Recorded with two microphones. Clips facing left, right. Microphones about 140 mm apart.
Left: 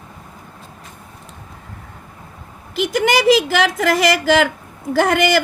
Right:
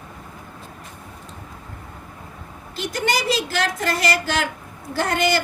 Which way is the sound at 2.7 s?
90° left.